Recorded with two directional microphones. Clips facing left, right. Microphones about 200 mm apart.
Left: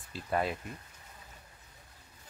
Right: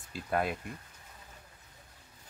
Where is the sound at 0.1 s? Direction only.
Centre (ahead or behind).